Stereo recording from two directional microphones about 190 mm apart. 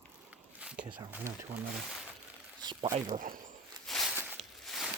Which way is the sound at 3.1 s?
45° right (ahead or behind).